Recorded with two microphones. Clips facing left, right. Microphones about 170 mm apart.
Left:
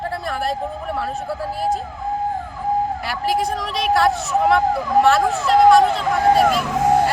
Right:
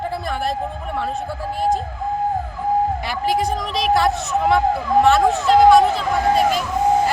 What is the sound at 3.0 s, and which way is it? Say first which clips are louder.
Speech: right 1 dB; centre (ahead or behind).